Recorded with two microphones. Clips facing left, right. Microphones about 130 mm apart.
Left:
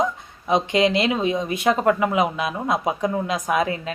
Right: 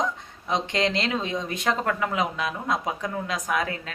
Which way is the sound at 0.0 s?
10° left (ahead or behind).